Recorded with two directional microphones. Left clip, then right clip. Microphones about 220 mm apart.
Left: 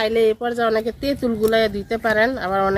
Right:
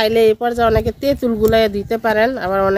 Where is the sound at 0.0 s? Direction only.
40° right (ahead or behind).